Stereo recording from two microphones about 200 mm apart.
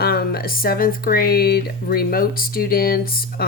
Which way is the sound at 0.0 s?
50° left (ahead or behind).